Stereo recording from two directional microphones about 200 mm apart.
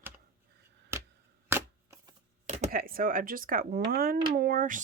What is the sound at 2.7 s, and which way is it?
Speech, 45° right (ahead or behind).